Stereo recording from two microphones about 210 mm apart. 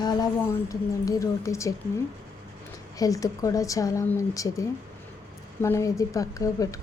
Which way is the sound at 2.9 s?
15° left (ahead or behind).